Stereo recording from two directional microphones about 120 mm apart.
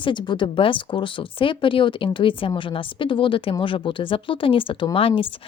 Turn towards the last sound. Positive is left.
turn(degrees=50)  # may be behind; listen again after turning